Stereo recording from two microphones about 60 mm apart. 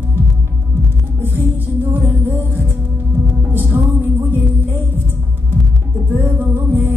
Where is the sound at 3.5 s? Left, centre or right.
Right.